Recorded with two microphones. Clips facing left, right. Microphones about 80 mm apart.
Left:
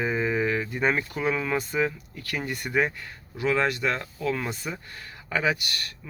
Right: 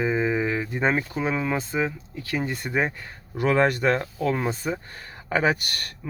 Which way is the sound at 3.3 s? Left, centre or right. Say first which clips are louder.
Right 4 dB; right.